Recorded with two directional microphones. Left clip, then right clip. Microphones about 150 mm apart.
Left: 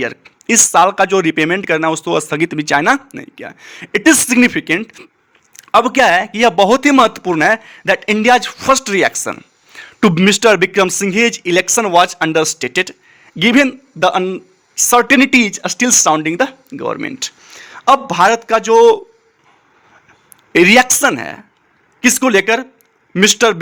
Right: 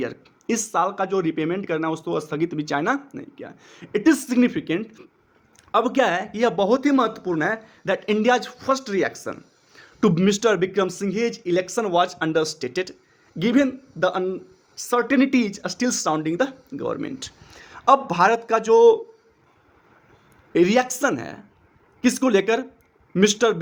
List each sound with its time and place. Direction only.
0.0 s speech: 20° left (ahead or behind); by 11.8 s 35° left (ahead or behind)
11.8 s speech: 25° left (ahead or behind)
20.5 s speech: 25° left (ahead or behind)